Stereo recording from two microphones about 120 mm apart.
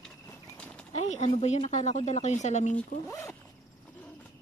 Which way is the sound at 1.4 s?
70° left (ahead or behind).